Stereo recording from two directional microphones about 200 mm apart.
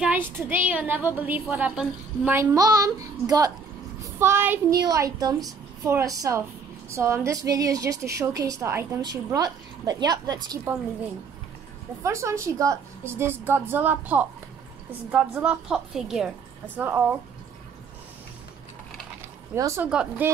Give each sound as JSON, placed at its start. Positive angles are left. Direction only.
{"t": 0.0, "sound": "a woman's voice", "side_deg": -10}
{"t": 12.0, "sound": "a woman's voice", "side_deg": -15}
{"t": 19.5, "sound": "a woman's voice", "side_deg": -15}